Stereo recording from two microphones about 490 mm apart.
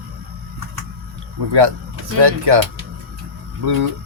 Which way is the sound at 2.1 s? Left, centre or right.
Right.